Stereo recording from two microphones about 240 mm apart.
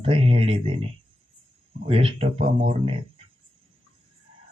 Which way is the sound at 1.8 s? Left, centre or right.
Right.